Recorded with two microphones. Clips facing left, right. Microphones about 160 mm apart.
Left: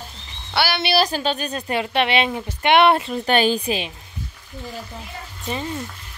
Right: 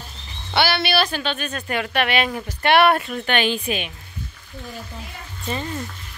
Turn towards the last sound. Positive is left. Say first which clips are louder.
# even
turn(degrees=10)  # may be behind; listen again after turning